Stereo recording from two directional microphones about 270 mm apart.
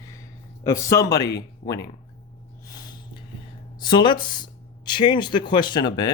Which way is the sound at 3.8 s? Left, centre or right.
Centre.